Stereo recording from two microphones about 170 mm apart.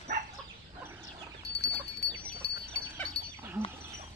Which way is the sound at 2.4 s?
80° left.